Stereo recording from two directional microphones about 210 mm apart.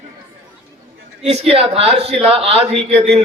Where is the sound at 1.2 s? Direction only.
25° right (ahead or behind).